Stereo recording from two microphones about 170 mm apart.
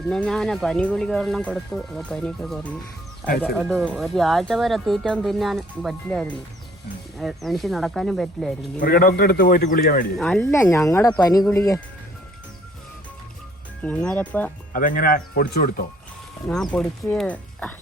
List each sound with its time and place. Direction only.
0.1 s speech: 5° left (ahead or behind)
8.8 s a man's voice: 60° left (ahead or behind)
10.2 s speech: 5° left (ahead or behind)
13.8 s speech: 5° left (ahead or behind)
14.7 s a man's voice: 55° left (ahead or behind)
16.7 s speech: 5° left (ahead or behind)